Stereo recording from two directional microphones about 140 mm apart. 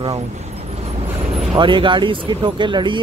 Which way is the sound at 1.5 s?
35° right (ahead or behind).